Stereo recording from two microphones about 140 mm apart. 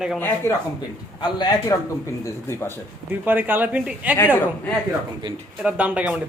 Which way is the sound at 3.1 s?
15° right (ahead or behind).